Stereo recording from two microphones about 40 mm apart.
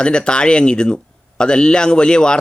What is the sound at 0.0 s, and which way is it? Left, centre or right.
Speech, left.